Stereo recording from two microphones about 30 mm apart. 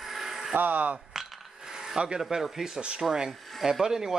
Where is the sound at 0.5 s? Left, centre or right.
Right.